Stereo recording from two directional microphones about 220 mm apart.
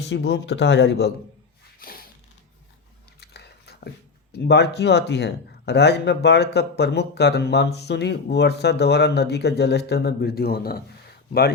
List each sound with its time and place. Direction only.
0.1 s speech: 55° left (ahead or behind)
1.8 s a sound: 40° left (ahead or behind)
3.2 s speech: 45° left (ahead or behind)